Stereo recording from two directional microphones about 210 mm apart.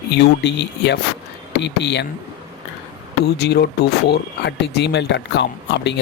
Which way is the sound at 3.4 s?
50° left (ahead or behind).